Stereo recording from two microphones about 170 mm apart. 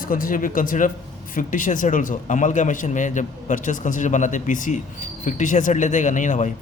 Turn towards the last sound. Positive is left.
turn(degrees=45)  # may be behind; listen again after turning